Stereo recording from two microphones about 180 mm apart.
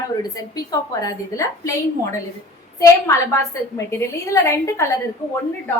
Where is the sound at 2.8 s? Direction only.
15° left (ahead or behind).